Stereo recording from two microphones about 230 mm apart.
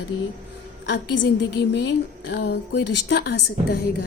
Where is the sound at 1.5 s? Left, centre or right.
Left.